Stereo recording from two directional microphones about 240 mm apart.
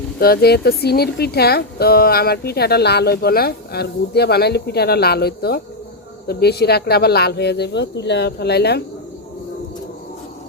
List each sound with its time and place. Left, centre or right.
0.2 s speech: left